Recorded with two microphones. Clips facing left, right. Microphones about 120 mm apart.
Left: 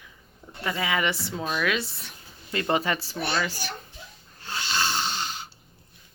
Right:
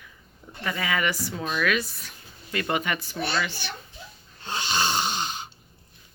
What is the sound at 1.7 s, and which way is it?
Speech, 25° left (ahead or behind).